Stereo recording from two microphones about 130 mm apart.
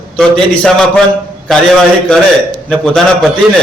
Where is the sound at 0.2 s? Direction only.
5° left (ahead or behind).